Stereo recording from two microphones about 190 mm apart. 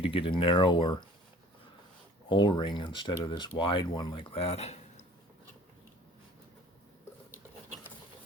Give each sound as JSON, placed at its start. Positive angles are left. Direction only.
{"t": 0.0, "sound": "speech", "side_deg": 30}
{"t": 2.3, "sound": "speech", "side_deg": 25}